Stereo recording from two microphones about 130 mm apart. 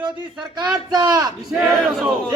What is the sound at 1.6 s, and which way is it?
Speech, 10° right (ahead or behind).